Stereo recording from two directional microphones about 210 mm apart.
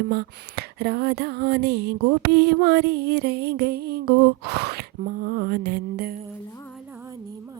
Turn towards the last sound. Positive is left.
turn(degrees=-50)  # may be behind; listen again after turning